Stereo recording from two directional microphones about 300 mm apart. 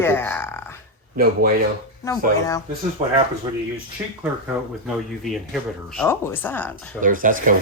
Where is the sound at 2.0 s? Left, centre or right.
Centre.